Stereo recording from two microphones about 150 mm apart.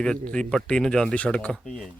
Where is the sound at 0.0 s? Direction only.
5° left (ahead or behind).